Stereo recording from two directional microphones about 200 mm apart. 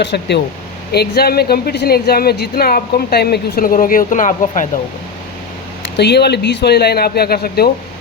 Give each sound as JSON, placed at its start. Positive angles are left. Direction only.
{"t": 0.0, "sound": "speech", "side_deg": 60}
{"t": 6.0, "sound": "speech", "side_deg": 55}